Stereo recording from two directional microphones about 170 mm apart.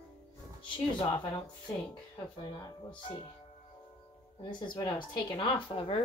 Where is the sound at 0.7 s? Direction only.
25° left (ahead or behind).